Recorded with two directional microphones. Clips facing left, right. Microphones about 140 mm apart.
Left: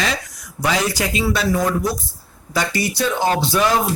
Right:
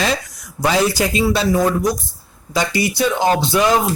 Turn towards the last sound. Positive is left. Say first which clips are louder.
# right 2 dB
turn(degrees=-20)  # may be behind; listen again after turning